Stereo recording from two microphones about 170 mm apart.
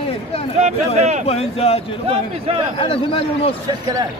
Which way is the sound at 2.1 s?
35° right (ahead or behind).